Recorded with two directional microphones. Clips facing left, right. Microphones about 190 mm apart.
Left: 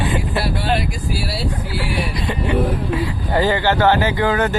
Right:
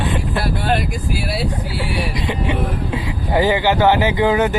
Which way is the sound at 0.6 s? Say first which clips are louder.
Right 1 dB; 50° right (ahead or behind).